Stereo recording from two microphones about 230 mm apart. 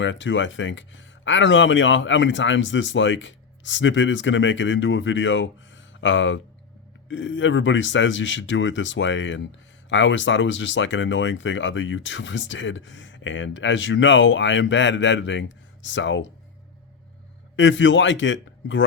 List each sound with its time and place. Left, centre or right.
0.0 s speech: left
17.6 s speech: left